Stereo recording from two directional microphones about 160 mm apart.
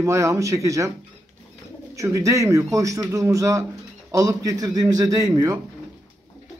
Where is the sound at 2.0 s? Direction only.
20° right (ahead or behind).